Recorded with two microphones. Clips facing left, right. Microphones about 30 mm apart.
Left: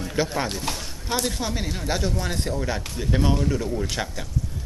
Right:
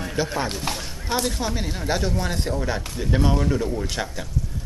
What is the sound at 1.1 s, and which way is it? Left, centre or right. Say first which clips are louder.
Speech: right 1 dB; centre.